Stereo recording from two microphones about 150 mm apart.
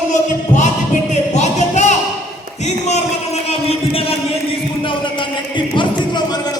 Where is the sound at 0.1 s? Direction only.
55° left (ahead or behind).